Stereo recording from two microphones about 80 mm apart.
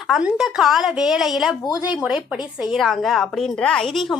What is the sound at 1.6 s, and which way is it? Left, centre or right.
Speech, left.